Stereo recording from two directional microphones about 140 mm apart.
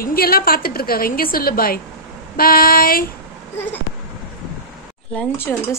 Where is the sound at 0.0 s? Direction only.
90° left.